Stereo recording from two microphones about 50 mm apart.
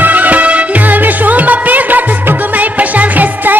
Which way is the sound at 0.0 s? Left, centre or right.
Right.